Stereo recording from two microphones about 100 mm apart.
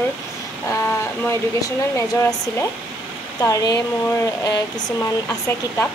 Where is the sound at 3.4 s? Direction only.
35° left (ahead or behind).